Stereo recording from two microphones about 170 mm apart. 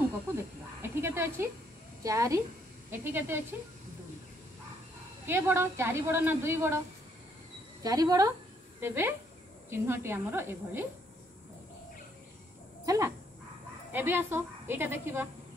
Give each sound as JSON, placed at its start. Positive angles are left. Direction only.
{"t": 0.8, "sound": "a sound", "side_deg": -15}
{"t": 2.0, "sound": "speech", "side_deg": -20}
{"t": 5.2, "sound": "speech", "side_deg": -15}
{"t": 7.8, "sound": "a woman's voice", "side_deg": -20}
{"t": 12.8, "sound": "speech", "side_deg": -20}